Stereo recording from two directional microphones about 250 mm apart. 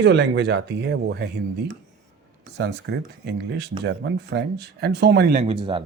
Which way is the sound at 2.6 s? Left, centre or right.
Right.